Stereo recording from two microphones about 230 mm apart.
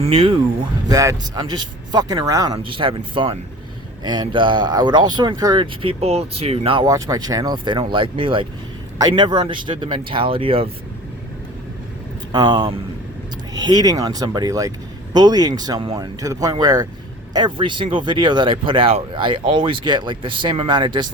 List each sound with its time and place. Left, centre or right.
0.0 s speech: right
12.3 s speech: right